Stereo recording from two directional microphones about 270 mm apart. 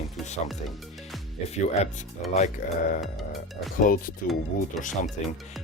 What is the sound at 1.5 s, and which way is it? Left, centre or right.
Speech, left.